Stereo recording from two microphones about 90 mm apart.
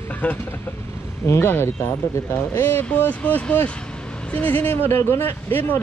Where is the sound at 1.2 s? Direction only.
25° left (ahead or behind).